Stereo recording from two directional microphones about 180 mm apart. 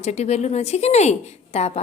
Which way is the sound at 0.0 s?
35° left (ahead or behind).